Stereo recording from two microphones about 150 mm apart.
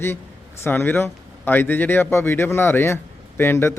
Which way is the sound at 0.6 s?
15° left (ahead or behind).